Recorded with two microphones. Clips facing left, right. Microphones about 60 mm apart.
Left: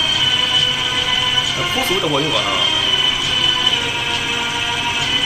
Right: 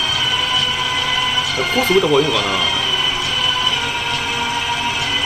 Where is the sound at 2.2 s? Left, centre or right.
Right.